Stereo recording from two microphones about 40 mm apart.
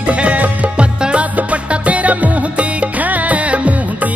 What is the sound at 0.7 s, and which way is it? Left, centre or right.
Music, right.